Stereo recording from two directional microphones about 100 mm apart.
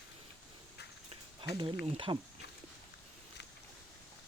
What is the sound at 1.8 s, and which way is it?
Speech, 90° right.